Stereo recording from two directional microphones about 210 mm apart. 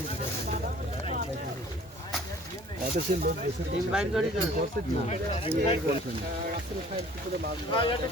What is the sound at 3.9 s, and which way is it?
Speech, 5° right (ahead or behind).